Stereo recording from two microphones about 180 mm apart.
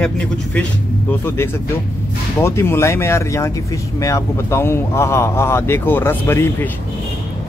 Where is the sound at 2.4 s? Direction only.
15° left (ahead or behind).